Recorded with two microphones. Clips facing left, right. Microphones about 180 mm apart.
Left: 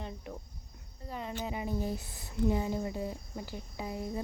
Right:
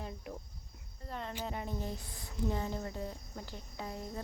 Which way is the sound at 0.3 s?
5° right (ahead or behind).